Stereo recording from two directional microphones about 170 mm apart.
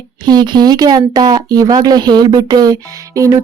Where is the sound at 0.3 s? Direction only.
25° right (ahead or behind).